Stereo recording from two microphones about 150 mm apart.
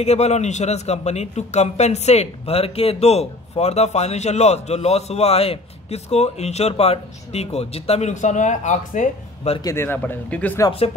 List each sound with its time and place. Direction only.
0.0 s a man's voice: 45° left (ahead or behind)
9.6 s speech: 20° left (ahead or behind)